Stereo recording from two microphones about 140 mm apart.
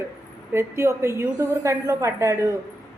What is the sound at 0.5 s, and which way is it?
A woman's voice, 20° right (ahead or behind).